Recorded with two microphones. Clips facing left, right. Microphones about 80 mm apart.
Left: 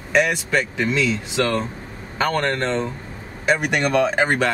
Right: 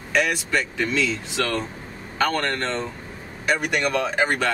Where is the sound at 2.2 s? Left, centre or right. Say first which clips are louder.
Left 2 dB; centre.